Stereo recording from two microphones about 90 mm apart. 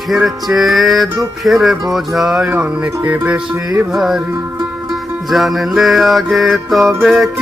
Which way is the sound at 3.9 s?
5° right (ahead or behind).